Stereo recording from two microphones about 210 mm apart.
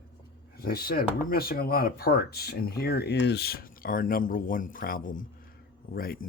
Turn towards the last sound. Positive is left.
turn(degrees=45)  # may be behind; listen again after turning